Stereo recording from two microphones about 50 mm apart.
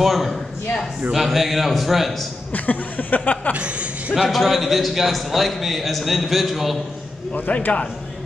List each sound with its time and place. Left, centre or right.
0.0 s a man's voice: centre
2.5 s speech: left
3.5 s speech: right
4.1 s a man's voice: centre
7.3 s a man's voice: left